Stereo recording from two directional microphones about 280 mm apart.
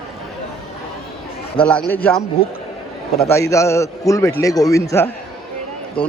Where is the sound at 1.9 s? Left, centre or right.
Centre.